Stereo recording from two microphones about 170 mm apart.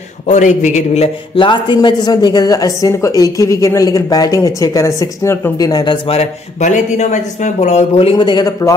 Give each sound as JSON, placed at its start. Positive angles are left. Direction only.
{"t": 0.3, "sound": "a man's voice", "side_deg": 45}